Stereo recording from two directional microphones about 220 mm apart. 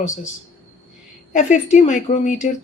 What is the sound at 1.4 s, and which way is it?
Speech, 35° left (ahead or behind).